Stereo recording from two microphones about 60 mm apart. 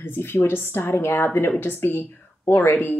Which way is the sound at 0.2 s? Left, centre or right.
Left.